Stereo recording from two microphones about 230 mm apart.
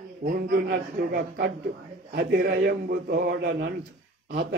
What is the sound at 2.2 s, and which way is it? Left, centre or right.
Mantra, right.